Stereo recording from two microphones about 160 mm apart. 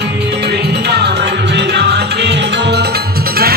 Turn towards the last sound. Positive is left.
turn(degrees=-75)  # may be behind; listen again after turning